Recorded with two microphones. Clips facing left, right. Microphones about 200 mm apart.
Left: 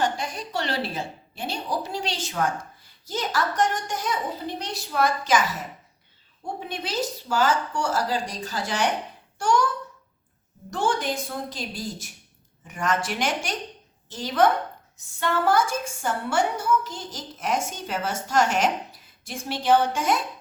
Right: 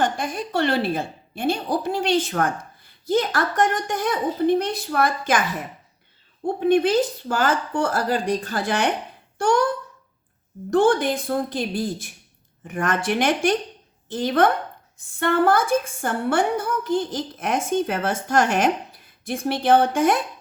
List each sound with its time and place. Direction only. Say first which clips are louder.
0.0 s a woman's voice: right 3 dB; 55° right (ahead or behind)
10.7 s a woman's voice: right 8 dB; 55° right (ahead or behind)